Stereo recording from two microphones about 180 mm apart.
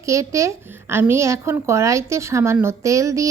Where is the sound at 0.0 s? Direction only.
15° right (ahead or behind).